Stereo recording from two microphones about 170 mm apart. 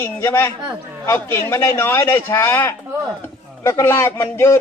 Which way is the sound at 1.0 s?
15° left (ahead or behind).